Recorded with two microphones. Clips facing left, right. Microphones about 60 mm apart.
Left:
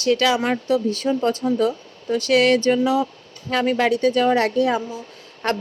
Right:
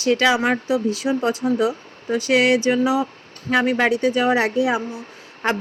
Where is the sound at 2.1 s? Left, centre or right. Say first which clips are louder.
Even; right.